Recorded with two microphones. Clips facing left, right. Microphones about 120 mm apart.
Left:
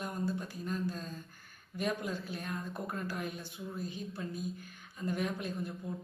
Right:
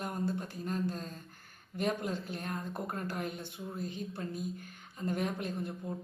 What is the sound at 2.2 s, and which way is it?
Speech, 50° right (ahead or behind).